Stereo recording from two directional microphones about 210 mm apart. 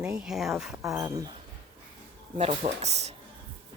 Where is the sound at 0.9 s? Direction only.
15° right (ahead or behind).